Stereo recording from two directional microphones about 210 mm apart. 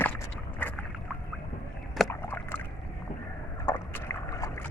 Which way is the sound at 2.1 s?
10° left (ahead or behind).